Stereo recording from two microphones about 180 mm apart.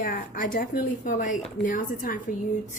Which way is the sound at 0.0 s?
50° left (ahead or behind).